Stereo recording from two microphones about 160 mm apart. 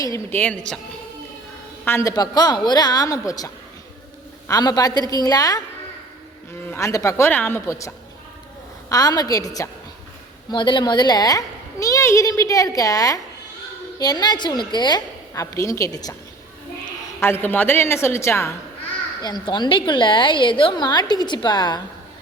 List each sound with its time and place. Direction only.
0.0 s a woman's voice: 15° left (ahead or behind)
1.8 s a child's voice: 15° left (ahead or behind)
6.7 s a woman's voice: 20° left (ahead or behind)
17.2 s a woman's voice: 15° left (ahead or behind)